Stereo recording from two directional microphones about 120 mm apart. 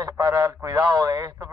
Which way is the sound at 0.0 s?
30° right (ahead or behind).